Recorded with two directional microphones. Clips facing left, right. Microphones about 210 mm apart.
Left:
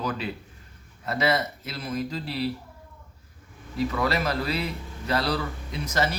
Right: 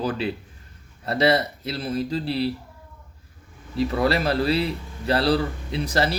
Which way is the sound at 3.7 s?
30° right (ahead or behind).